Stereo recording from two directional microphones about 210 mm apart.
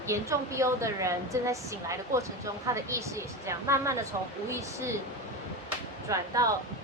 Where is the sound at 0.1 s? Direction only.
15° right (ahead or behind).